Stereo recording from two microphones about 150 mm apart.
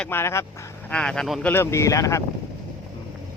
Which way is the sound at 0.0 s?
15° left (ahead or behind).